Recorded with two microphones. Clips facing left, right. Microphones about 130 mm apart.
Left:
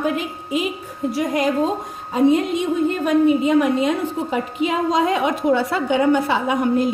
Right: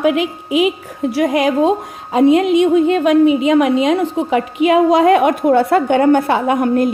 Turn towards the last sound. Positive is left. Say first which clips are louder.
# right 4 dB
turn(degrees=-55)  # may be behind; listen again after turning